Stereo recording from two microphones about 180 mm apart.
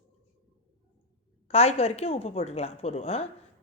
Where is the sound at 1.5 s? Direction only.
35° left (ahead or behind).